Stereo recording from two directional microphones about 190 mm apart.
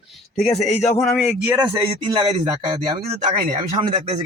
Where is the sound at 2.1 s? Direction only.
25° right (ahead or behind).